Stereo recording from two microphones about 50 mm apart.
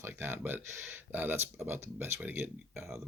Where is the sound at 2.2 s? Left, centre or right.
Right.